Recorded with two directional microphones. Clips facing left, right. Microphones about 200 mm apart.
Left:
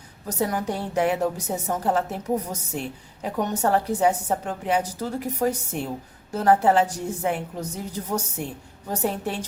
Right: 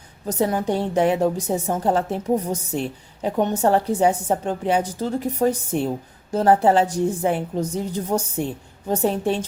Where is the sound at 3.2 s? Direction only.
25° right (ahead or behind).